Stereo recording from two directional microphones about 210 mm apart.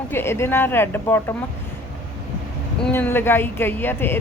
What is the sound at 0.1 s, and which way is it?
Speech, 10° left (ahead or behind).